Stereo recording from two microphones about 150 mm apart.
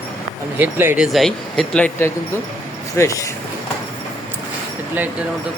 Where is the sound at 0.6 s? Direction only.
15° right (ahead or behind).